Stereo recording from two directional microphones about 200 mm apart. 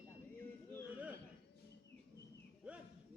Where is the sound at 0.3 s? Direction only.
10° left (ahead or behind).